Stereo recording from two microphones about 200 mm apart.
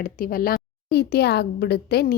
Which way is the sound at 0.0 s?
45° left (ahead or behind).